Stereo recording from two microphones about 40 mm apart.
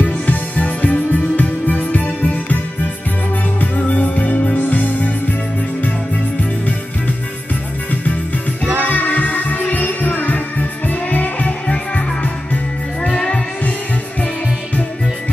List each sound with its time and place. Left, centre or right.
0.0 s music: left
3.7 s music: left
8.8 s music: left